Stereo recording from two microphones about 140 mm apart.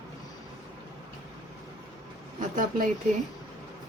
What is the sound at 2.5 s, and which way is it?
Speech, 70° right (ahead or behind).